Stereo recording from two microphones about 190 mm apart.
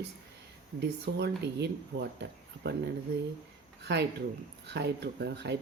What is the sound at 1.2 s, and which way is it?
Speech, 60° right (ahead or behind).